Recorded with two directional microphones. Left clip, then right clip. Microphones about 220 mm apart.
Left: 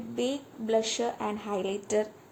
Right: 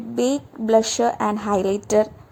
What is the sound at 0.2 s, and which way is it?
A woman's voice, 40° right (ahead or behind).